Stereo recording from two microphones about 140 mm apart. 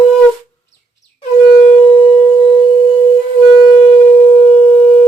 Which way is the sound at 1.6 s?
40° left (ahead or behind).